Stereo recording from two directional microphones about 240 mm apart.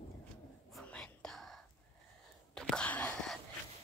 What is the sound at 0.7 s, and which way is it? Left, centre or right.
Whispering, centre.